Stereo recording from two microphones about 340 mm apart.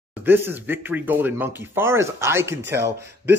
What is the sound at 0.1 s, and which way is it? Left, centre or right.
Speech, centre.